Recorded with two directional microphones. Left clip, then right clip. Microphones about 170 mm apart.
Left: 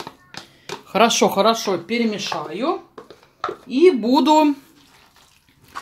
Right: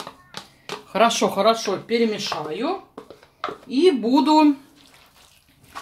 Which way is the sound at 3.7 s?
50° left (ahead or behind).